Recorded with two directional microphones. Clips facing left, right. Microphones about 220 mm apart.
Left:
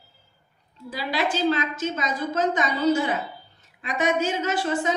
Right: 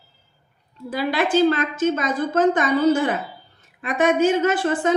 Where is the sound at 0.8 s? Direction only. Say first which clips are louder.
Right 5 dB; 55° right (ahead or behind).